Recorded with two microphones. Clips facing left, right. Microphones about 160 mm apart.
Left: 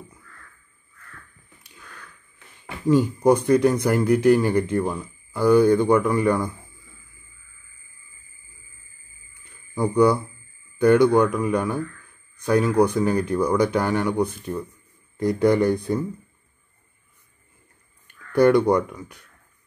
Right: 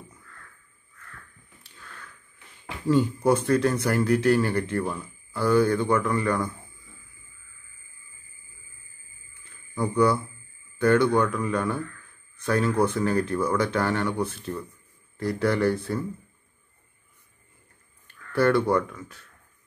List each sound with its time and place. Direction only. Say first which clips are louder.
2.9 s a man's voice: left 4 dB; 10° left (ahead or behind)
9.9 s a man's voice: left 4 dB; 20° left (ahead or behind)
18.3 s a man's voice: left 5 dB; 20° left (ahead or behind)